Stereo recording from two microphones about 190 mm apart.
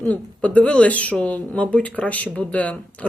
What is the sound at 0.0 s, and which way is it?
Speech, 5° left (ahead or behind).